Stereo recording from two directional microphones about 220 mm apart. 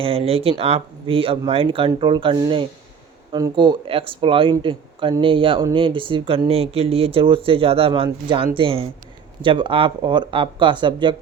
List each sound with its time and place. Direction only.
0.0 s speech: 25° right (ahead or behind)